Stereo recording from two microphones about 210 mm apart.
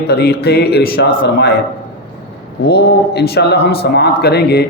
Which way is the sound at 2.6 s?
50° left (ahead or behind).